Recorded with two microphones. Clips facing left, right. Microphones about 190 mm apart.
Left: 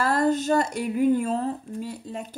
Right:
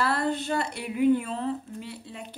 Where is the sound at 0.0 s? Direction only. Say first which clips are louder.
Left 5 dB; 45° left (ahead or behind).